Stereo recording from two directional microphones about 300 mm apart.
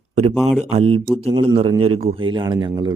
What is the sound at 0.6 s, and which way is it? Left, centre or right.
A man's voice, right.